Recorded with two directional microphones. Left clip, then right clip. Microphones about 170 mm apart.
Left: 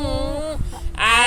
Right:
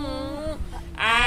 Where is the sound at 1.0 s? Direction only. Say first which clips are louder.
Left 5 dB; 60° left (ahead or behind).